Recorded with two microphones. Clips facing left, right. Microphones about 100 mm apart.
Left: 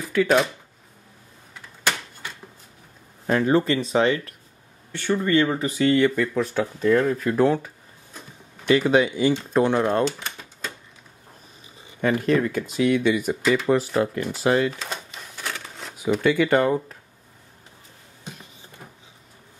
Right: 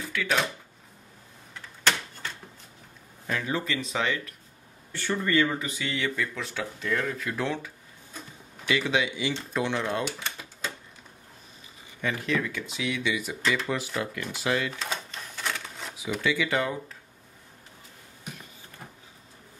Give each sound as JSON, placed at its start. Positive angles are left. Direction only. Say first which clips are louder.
{"t": 0.1, "sound": "speech", "louder": "left 10 dB", "side_deg": 40}
{"t": 1.5, "sound": "a sound", "louder": "left 1 dB", "side_deg": 10}
{"t": 3.3, "sound": "speech", "louder": "left 10 dB", "side_deg": 40}
{"t": 4.9, "sound": "speech", "louder": "left 5 dB", "side_deg": 20}
{"t": 5.6, "sound": "speech", "louder": "left 12 dB", "side_deg": 45}
{"t": 12.0, "sound": "speech", "louder": "left 8 dB", "side_deg": 45}
{"t": 13.7, "sound": "speech", "louder": "left 10 dB", "side_deg": 35}
{"t": 14.7, "sound": "speech", "louder": "left 1 dB", "side_deg": 0}
{"t": 15.0, "sound": "a sound", "louder": "even", "side_deg": 5}
{"t": 16.0, "sound": "speech", "louder": "left 8 dB", "side_deg": 50}